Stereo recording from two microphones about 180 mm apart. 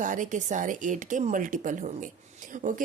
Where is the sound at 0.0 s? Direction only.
45° right (ahead or behind).